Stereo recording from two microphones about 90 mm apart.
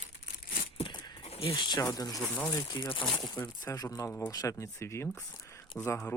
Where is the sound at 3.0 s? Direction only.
5° left (ahead or behind).